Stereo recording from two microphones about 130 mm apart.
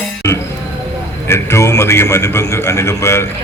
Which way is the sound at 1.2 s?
20° left (ahead or behind).